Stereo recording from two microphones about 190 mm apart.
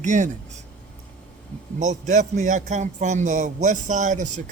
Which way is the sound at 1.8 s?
40° right (ahead or behind).